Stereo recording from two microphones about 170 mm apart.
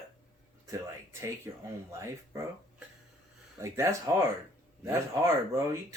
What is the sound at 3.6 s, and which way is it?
Speech, 15° right (ahead or behind).